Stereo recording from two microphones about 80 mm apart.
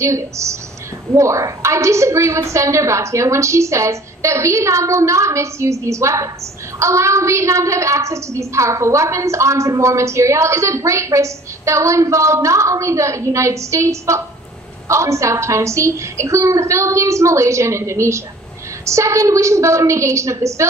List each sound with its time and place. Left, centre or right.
0.0 s a woman's voice: right